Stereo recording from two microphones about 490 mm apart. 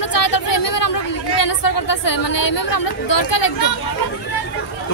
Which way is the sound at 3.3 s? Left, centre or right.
Left.